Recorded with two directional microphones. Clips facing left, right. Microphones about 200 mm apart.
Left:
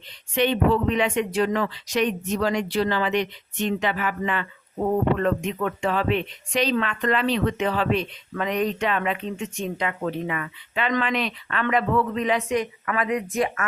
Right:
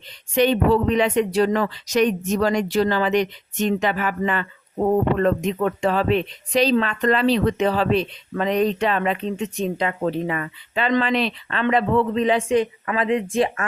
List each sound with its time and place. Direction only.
0.3 s speech: 40° right (ahead or behind)